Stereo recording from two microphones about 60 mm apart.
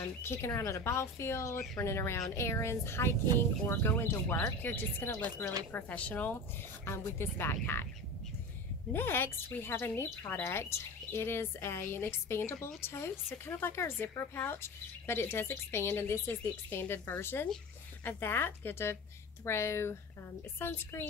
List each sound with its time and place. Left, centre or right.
0.5 s speech: left
4.6 s speech: left
6.9 s speech: left
8.9 s speech: left